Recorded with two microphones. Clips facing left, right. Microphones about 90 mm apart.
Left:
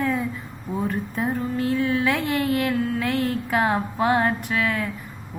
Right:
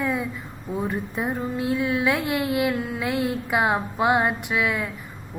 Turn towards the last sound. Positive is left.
turn(degrees=-10)  # may be behind; listen again after turning